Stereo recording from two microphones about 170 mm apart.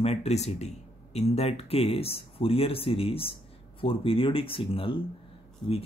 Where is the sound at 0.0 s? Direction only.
40° left (ahead or behind).